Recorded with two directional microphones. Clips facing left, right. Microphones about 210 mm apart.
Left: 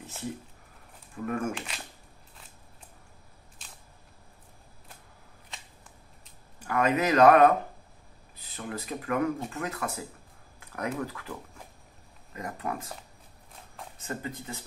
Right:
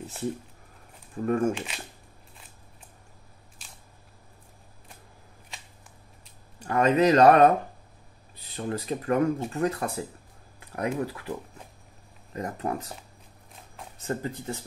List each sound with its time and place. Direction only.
1.1 s speech: 35° right (ahead or behind)
6.7 s speech: 30° right (ahead or behind)
8.5 s speech: 35° right (ahead or behind)
10.8 s speech: 25° right (ahead or behind)
12.4 s speech: 40° right (ahead or behind)
14.0 s speech: 35° right (ahead or behind)